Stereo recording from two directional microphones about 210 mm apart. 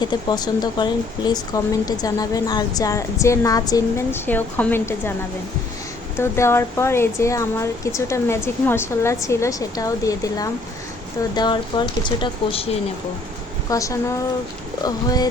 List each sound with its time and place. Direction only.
0.0 s speech: 20° left (ahead or behind)
6.1 s speech: 10° left (ahead or behind)
13.7 s speech: 15° left (ahead or behind)